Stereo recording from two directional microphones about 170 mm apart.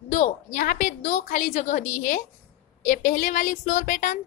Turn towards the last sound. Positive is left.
turn(degrees=50)  # may be behind; listen again after turning